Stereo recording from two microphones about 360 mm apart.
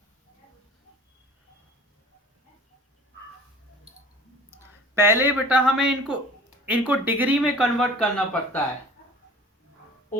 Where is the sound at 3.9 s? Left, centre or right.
Centre.